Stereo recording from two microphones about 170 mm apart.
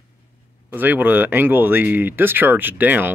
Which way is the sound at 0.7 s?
10° right (ahead or behind).